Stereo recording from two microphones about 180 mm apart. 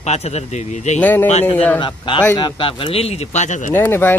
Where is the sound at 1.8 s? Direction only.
25° left (ahead or behind).